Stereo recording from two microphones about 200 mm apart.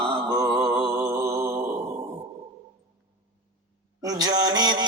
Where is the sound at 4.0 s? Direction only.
20° right (ahead or behind).